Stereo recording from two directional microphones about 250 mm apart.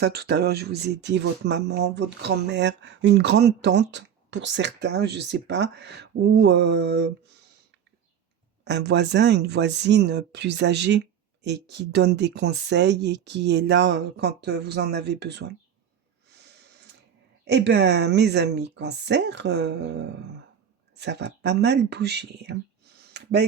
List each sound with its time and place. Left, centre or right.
0.0 s speech: right
8.6 s speech: right
16.3 s snort: right
17.4 s speech: right
23.1 s a sound: right